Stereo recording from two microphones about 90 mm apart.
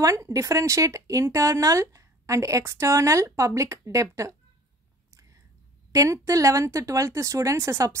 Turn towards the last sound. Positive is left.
turn(degrees=-35)  # may be behind; listen again after turning